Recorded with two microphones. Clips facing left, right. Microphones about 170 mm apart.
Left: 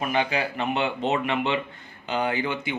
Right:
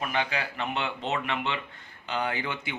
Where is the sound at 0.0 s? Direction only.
10° left (ahead or behind).